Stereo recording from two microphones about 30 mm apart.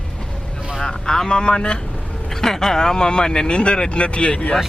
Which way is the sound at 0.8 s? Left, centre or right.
Left.